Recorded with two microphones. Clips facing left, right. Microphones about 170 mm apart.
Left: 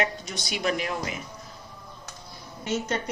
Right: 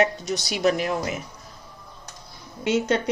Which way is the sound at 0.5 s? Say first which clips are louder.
Right 5 dB; 45° right (ahead or behind).